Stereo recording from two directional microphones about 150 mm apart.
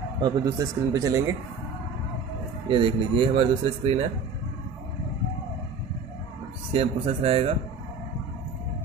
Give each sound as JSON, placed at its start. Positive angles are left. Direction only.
{"t": 0.2, "sound": "speech", "side_deg": -25}
{"t": 2.7, "sound": "speech", "side_deg": -35}
{"t": 6.7, "sound": "speech", "side_deg": -40}